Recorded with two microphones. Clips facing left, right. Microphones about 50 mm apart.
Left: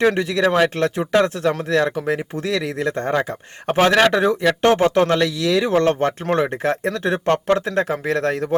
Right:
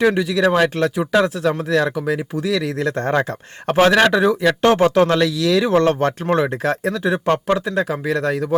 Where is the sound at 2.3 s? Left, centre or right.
Left.